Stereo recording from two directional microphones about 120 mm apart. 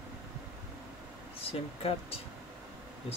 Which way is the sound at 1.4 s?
50° left (ahead or behind).